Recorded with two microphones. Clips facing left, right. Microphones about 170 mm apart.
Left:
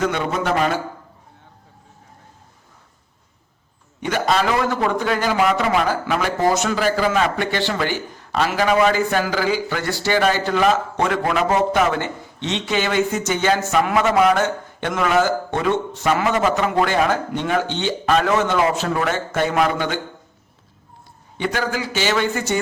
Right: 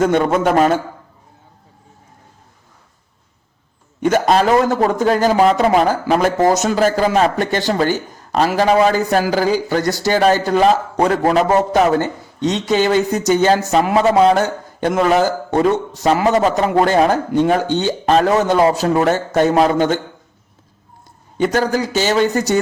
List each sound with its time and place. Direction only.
0.0 s a man's voice: 45° right (ahead or behind)
4.0 s a man's voice: 45° right (ahead or behind)
21.3 s a man's voice: 40° right (ahead or behind)